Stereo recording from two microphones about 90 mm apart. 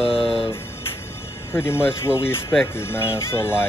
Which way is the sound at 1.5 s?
25° left (ahead or behind).